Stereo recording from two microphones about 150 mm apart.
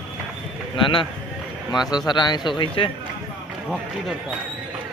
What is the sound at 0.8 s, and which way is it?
Speech, 35° left (ahead or behind).